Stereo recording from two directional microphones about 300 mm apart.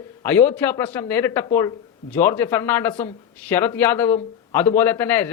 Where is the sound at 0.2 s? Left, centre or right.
Centre.